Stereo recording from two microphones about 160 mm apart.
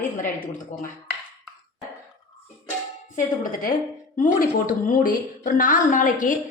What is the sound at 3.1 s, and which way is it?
A woman's voice, 55° left (ahead or behind).